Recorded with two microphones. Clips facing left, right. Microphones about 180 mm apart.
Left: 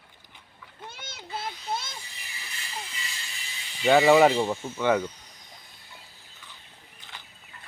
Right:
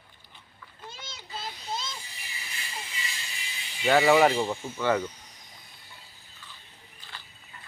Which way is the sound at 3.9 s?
10° left (ahead or behind).